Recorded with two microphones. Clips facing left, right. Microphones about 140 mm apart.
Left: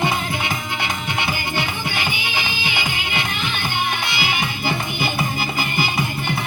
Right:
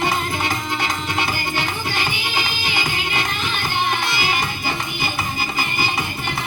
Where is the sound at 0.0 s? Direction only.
45° right (ahead or behind).